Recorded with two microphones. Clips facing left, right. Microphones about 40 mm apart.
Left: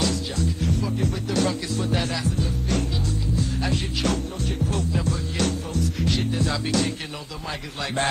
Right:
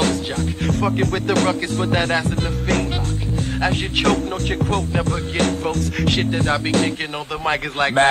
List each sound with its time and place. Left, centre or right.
0.0 s music: right
5.9 s music: right
6.3 s music: right